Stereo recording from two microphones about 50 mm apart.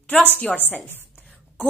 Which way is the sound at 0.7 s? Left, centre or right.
Left.